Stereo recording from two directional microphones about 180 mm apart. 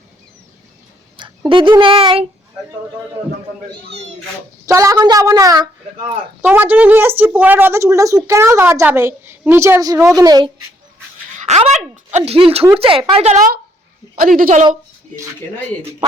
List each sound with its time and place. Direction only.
1.5 s a woman's voice: 30° right (ahead or behind)
4.6 s a woman's voice: 15° right (ahead or behind)
6.4 s a woman's voice: 10° right (ahead or behind)
11.3 s a woman's voice: 40° right (ahead or behind)
14.2 s speech: 50° right (ahead or behind)